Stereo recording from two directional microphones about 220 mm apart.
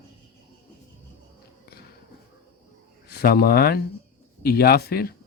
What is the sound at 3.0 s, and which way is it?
Speech, 45° left (ahead or behind).